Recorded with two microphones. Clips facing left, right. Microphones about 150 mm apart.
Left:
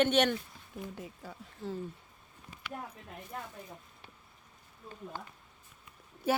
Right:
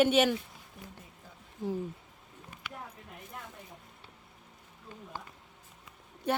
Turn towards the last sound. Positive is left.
turn(degrees=5)  # may be behind; listen again after turning